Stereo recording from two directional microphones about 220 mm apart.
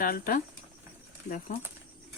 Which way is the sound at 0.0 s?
40° left (ahead or behind).